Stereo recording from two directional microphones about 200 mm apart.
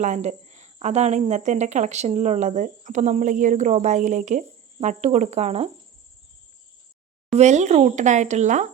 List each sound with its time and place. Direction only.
0.0 s speech: 35° right (ahead or behind)
7.3 s speech: 35° right (ahead or behind)